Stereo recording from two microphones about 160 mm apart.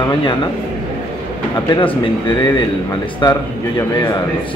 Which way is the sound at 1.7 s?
30° left (ahead or behind).